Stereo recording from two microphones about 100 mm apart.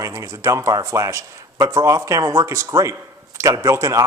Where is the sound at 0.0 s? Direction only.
30° right (ahead or behind).